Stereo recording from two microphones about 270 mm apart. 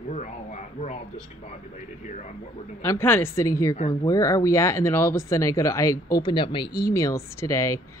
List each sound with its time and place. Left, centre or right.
0.1 s frog: left
2.8 s speech: centre